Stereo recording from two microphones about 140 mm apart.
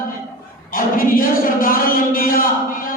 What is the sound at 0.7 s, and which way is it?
Speech, 90° left.